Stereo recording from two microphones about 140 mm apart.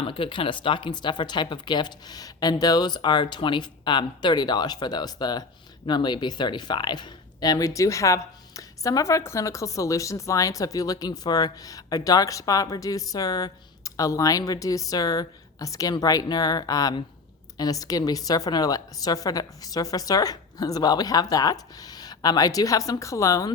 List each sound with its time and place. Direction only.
0.0 s speech: 40° left (ahead or behind); by 23.5 s 25° left (ahead or behind)